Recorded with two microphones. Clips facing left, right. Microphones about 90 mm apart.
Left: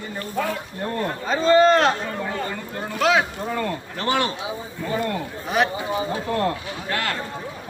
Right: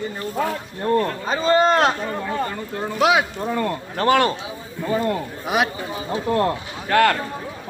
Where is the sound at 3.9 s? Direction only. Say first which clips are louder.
Right 6 dB; 45° right (ahead or behind).